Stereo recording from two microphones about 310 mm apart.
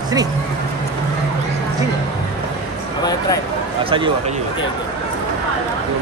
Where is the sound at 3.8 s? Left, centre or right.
Centre.